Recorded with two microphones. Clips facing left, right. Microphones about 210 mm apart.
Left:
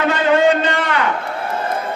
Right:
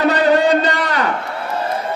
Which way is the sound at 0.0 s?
40° right (ahead or behind).